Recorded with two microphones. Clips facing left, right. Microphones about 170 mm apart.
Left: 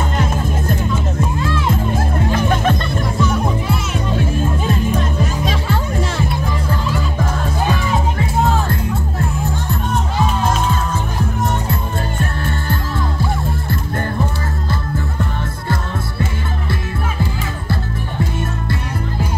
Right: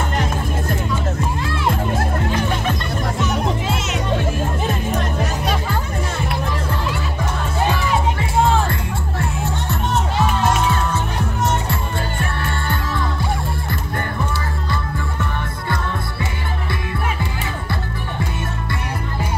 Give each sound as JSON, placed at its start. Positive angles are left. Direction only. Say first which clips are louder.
{"t": 3.2, "sound": "music", "louder": "left 3 dB", "side_deg": -20}
{"t": 5.2, "sound": "music", "louder": "left 1 dB", "side_deg": -65}
{"t": 11.7, "sound": "music", "louder": "left 2 dB", "side_deg": -65}